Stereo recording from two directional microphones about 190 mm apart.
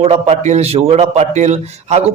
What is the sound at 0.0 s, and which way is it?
A man's voice, 30° right (ahead or behind).